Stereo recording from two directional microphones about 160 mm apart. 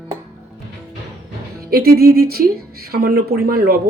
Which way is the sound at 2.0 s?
75° right (ahead or behind).